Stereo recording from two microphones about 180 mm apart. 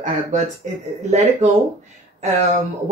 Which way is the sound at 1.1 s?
40° right (ahead or behind).